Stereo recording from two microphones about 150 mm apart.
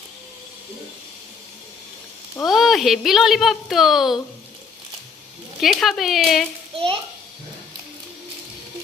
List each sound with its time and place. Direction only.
2.5 s speech: centre (ahead or behind)
5.5 s speech: centre (ahead or behind)
6.7 s a child's voice: 35° right (ahead or behind)